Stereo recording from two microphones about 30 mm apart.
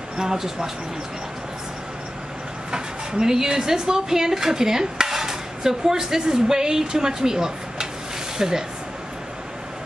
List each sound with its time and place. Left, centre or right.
0.2 s speech: centre
2.7 s speech: right